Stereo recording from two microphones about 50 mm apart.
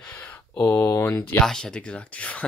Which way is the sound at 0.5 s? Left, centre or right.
Left.